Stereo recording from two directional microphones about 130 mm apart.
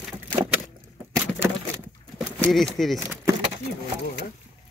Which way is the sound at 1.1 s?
20° right (ahead or behind).